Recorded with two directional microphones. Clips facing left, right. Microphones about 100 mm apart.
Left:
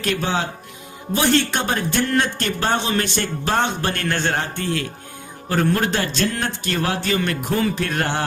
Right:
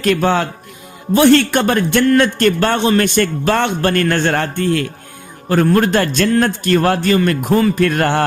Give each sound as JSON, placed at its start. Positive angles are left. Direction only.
{"t": 0.0, "sound": "a man's voice", "side_deg": -55}